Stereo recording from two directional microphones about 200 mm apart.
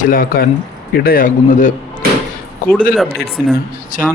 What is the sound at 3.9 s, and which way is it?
Speech, 40° left (ahead or behind).